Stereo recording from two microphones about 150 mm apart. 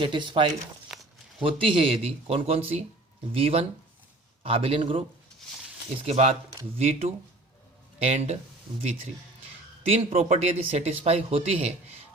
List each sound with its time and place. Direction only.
0.0 s speech: 30° right (ahead or behind)
0.9 s a sound: 5° right (ahead or behind)
1.4 s speech: 35° right (ahead or behind)
6.1 s speech: 45° right (ahead or behind)
9.8 s speech: 45° right (ahead or behind)